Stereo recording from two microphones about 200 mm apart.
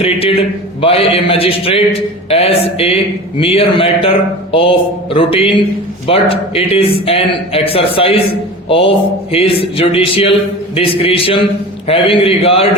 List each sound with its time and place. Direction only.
0.0 s a man's voice: 30° left (ahead or behind)